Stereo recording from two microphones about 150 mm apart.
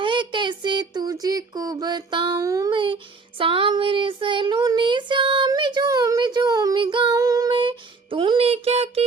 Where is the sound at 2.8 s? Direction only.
35° right (ahead or behind).